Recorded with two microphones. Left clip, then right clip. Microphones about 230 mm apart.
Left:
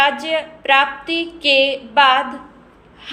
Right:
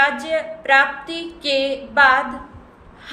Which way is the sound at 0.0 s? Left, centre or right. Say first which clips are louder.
Left 2 dB; centre.